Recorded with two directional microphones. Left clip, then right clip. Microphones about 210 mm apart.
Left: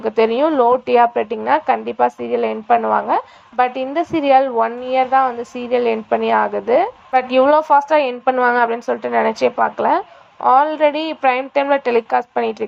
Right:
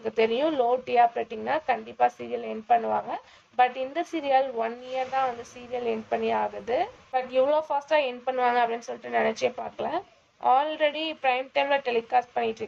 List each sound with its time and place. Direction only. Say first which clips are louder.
0.0 s a woman's voice: left 9 dB; 20° left (ahead or behind)